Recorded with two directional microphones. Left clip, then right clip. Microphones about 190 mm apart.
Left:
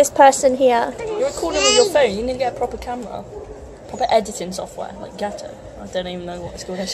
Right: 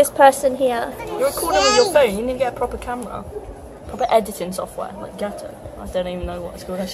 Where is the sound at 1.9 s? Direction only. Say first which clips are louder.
Right 1 dB; 10° left (ahead or behind).